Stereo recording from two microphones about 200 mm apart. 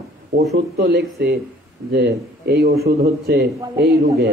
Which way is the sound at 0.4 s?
50° right (ahead or behind).